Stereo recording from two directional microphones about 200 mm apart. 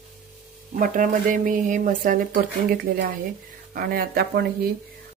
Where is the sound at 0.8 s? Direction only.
40° right (ahead or behind).